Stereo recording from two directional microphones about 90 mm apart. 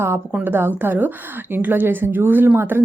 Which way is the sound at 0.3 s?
20° right (ahead or behind).